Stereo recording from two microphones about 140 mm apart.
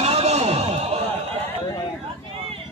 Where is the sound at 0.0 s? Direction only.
50° right (ahead or behind).